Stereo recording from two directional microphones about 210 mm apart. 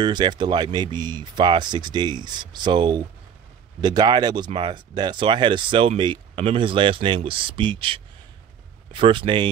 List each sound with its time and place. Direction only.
0.0 s speech: 20° right (ahead or behind)